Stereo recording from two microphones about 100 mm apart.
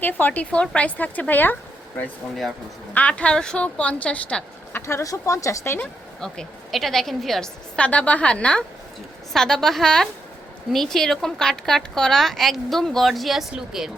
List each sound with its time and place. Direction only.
0.0 s a woman's voice: 15° left (ahead or behind)
2.9 s a woman's voice: 10° left (ahead or behind)
4.7 s a woman's voice: 25° left (ahead or behind)
6.1 s a woman's voice: 5° left (ahead or behind)